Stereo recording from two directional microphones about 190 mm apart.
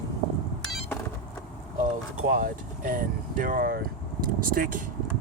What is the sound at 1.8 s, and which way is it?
Speech, 45° right (ahead or behind).